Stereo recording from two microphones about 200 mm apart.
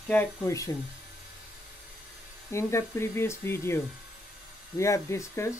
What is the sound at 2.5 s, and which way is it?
Speech, 15° left (ahead or behind).